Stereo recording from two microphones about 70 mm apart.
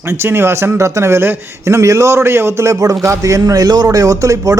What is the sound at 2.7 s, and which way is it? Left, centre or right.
A man's voice, right.